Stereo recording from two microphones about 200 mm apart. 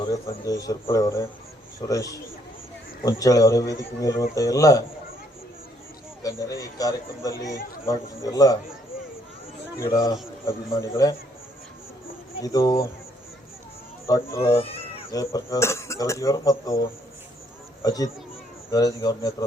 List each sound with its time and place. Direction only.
0.0 s a man's voice: 20° left (ahead or behind)
6.2 s a man's voice: 15° left (ahead or behind)
9.7 s a man's voice: 15° left (ahead or behind)
12.4 s a man's voice: 15° left (ahead or behind)
14.1 s a man's voice: 15° left (ahead or behind)
14.5 s speech: 30° left (ahead or behind)
15.1 s a man's voice: 15° left (ahead or behind)
17.8 s a man's voice: 15° left (ahead or behind)